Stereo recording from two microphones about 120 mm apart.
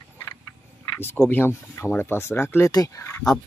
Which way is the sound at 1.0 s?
20° left (ahead or behind).